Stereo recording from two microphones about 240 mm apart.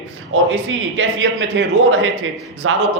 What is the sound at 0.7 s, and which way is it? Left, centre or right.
A man's voice, right.